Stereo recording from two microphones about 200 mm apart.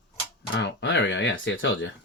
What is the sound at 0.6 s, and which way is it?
Speech, 60° left (ahead or behind).